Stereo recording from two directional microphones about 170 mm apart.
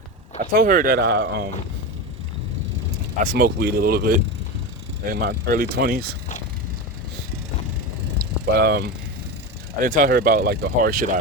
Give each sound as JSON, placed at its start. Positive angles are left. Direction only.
{"t": 0.3, "sound": "speech", "side_deg": -55}
{"t": 3.2, "sound": "speech", "side_deg": -60}
{"t": 8.4, "sound": "mechanisms", "side_deg": -70}
{"t": 9.8, "sound": "speech", "side_deg": -55}